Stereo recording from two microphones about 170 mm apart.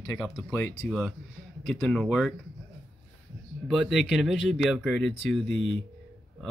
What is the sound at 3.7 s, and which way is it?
Speech, centre (ahead or behind).